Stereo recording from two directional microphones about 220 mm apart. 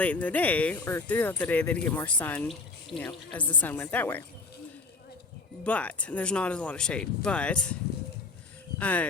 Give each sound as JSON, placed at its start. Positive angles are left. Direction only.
{"t": 0.0, "sound": "speech", "side_deg": 5}
{"t": 5.6, "sound": "speech", "side_deg": 5}
{"t": 8.8, "sound": "speech", "side_deg": 5}